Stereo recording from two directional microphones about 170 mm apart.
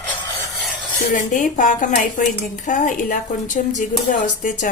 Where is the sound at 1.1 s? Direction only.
50° left (ahead or behind).